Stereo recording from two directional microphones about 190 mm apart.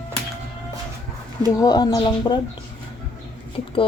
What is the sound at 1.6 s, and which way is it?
Speech, 20° left (ahead or behind).